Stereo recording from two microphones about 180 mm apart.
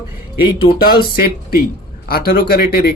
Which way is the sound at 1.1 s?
60° left (ahead or behind).